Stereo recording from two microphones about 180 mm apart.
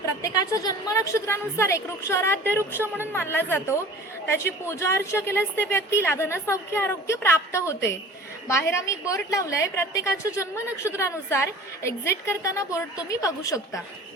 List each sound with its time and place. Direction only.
0.0 s a woman's voice: 20° left (ahead or behind)